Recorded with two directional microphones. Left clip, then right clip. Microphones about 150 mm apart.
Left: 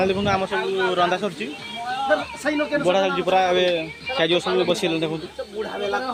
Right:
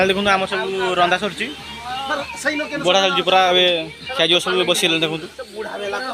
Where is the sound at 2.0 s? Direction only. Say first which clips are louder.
Even; 55° left (ahead or behind).